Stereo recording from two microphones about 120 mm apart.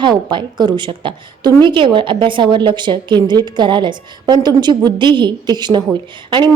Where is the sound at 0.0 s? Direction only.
40° right (ahead or behind).